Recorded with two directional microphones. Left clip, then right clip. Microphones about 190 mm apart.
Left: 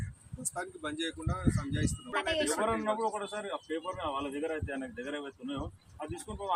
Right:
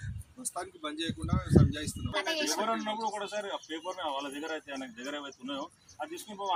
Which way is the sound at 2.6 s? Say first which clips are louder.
Left 1 dB; 15° right (ahead or behind).